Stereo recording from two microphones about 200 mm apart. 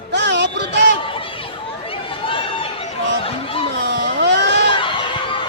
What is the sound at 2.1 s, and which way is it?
Chatter, 25° left (ahead or behind).